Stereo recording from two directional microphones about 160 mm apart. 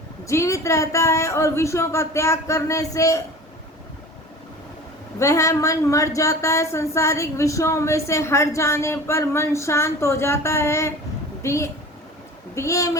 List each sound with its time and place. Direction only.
0.3 s speech: 20° left (ahead or behind)
5.2 s speech: 20° left (ahead or behind)